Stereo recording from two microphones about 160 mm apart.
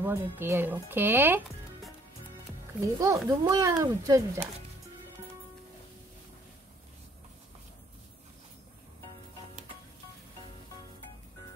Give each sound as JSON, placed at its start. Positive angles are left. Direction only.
{"t": 0.0, "sound": "speech", "side_deg": -15}
{"t": 2.8, "sound": "speech", "side_deg": -20}